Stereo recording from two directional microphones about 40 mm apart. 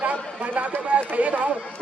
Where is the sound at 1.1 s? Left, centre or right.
Right.